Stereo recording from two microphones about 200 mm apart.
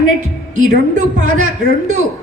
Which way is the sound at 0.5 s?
40° right (ahead or behind).